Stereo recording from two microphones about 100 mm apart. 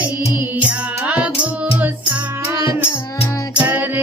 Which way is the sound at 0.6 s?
15° right (ahead or behind).